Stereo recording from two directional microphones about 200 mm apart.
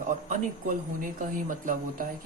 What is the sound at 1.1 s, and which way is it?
Speech, 40° right (ahead or behind).